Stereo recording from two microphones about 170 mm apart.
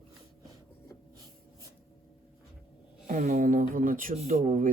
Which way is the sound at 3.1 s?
50° right (ahead or behind).